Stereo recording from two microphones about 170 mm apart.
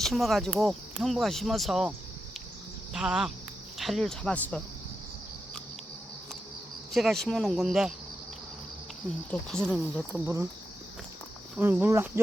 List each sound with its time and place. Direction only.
0.0 s speech: centre (ahead or behind)
2.9 s speech: 5° right (ahead or behind)
6.9 s speech: centre (ahead or behind)
9.0 s speech: 5° left (ahead or behind)
11.5 s speech: 10° right (ahead or behind)